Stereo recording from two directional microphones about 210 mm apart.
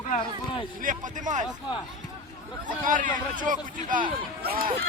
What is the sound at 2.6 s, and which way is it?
Speech, 40° right (ahead or behind).